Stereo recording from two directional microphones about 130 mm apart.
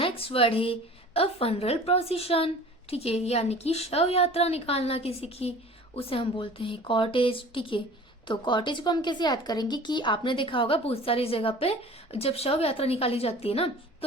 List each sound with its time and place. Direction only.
0.0 s speech: 45° left (ahead or behind)